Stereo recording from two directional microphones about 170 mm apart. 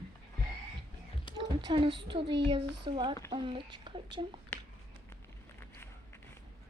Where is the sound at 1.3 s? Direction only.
30° left (ahead or behind).